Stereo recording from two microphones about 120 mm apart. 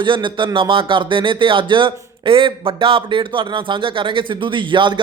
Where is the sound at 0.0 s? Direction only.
40° right (ahead or behind).